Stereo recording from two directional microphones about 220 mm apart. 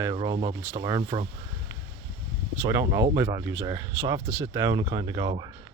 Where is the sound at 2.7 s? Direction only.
15° right (ahead or behind).